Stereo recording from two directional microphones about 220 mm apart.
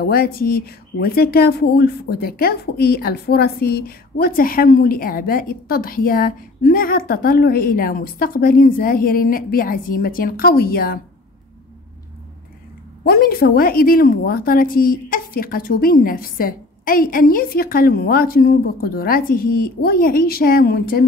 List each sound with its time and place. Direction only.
0.0 s speech: 45° left (ahead or behind)
13.0 s speech: 45° left (ahead or behind)